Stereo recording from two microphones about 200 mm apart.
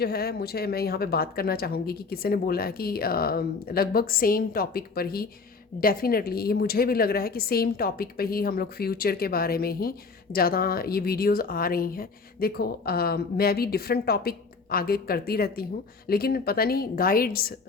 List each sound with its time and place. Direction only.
0.0 s speech: 50° left (ahead or behind)